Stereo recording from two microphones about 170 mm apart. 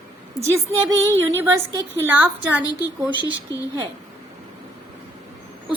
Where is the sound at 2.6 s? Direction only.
20° left (ahead or behind).